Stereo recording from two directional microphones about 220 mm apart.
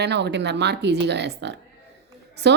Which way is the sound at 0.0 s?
50° right (ahead or behind).